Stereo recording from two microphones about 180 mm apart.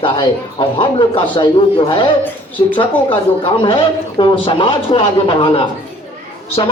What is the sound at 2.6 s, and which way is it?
Speech, 25° left (ahead or behind).